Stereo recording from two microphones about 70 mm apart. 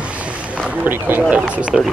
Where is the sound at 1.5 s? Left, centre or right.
Centre.